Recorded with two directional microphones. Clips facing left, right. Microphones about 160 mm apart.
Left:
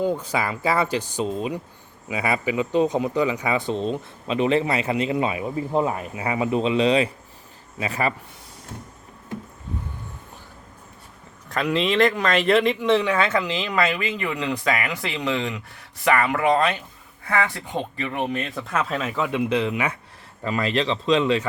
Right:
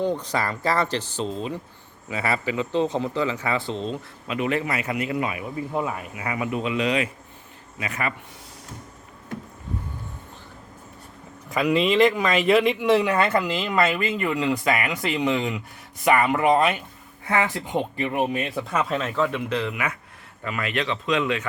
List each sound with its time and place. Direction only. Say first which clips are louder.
0.0 s speech: left 1 dB; 10° left (ahead or behind); by 8.1 s 30° left (ahead or behind)
11.4 s speech: right 2 dB; 5° right (ahead or behind)
17.2 s speech: even; 20° right (ahead or behind); by 21.4 s 30° left (ahead or behind)